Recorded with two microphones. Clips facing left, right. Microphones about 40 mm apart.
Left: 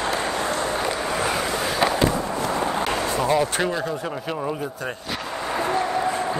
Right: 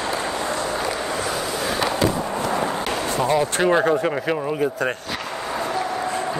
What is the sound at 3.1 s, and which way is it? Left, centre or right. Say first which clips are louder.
Speech: right 1 dB; centre.